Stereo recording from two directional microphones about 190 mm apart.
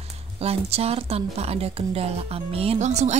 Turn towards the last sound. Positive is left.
turn(degrees=-35)  # may be behind; listen again after turning